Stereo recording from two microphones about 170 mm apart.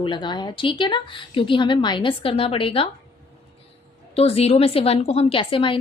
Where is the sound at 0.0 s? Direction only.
25° left (ahead or behind).